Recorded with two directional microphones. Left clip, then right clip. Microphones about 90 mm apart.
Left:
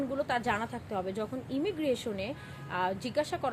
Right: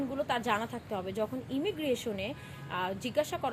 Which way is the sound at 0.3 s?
35° left (ahead or behind).